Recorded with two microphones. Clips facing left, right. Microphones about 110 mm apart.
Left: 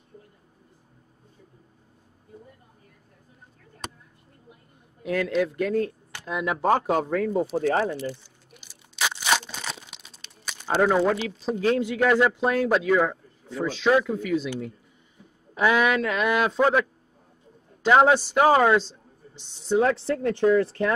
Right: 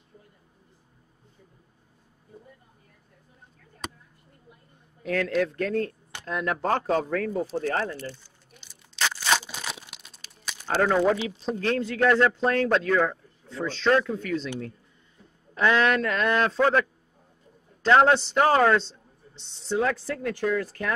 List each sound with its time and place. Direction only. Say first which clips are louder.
5.0 s a man's voice: left 1 dB; 10° left (ahead or behind)
8.5 s a sound: even; 5° left (ahead or behind)
9.4 s crumpling: left 1 dB; 5° right (ahead or behind)
10.7 s a man's voice: left 2 dB; 10° left (ahead or behind)
11.0 s a man's voice: even; centre (ahead or behind)
15.5 s a man's voice: left 1 dB; 10° left (ahead or behind)
17.8 s speech: left 1 dB; 10° left (ahead or behind)
19.8 s speech: left 3 dB; 25° left (ahead or behind)